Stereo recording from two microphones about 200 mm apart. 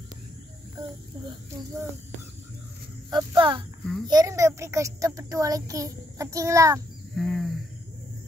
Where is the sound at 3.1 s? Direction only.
20° right (ahead or behind).